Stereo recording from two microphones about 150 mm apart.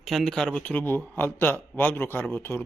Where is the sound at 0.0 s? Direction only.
Centre (ahead or behind).